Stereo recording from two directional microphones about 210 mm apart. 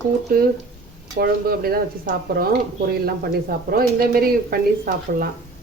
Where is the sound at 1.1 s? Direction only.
45° right (ahead or behind).